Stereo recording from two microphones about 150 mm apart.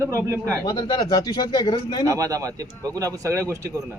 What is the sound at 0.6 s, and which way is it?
Speech, 25° left (ahead or behind).